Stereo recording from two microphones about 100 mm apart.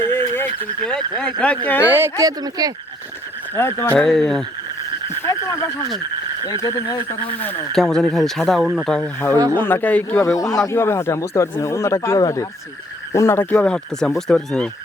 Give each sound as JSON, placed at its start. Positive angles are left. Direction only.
{"t": 0.0, "sound": "fowl", "side_deg": 25}
{"t": 1.4, "sound": "speech", "side_deg": 15}
{"t": 1.8, "sound": "speech", "side_deg": -20}
{"t": 2.1, "sound": "speech", "side_deg": -40}
{"t": 3.5, "sound": "speech", "side_deg": 25}
{"t": 3.9, "sound": "speech", "side_deg": 5}
{"t": 5.0, "sound": "frog", "side_deg": 30}
{"t": 6.6, "sound": "speech", "side_deg": 35}
{"t": 7.7, "sound": "speech", "side_deg": 5}
{"t": 9.6, "sound": "speech", "side_deg": 20}
{"t": 10.2, "sound": "speech", "side_deg": 35}
{"t": 13.1, "sound": "speech", "side_deg": 25}
{"t": 13.6, "sound": "speech", "side_deg": 10}